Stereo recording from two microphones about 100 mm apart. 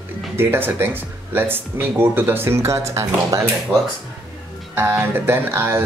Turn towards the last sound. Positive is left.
turn(degrees=-25)  # may be behind; listen again after turning